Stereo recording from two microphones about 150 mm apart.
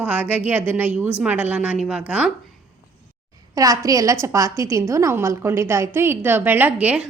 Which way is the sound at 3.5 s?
20° right (ahead or behind).